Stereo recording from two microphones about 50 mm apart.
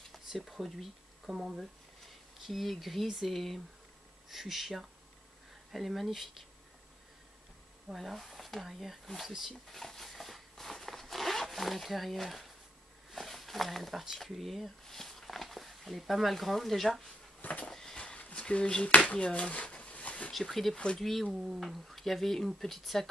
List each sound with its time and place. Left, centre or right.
0.4 s speech: centre
2.4 s speech: centre
7.9 s speech: centre
9.5 s a sound: centre
13.1 s speech: centre
17.4 s a sound: left
17.9 s a sound: left
18.9 s speech: left
20.3 s speech: centre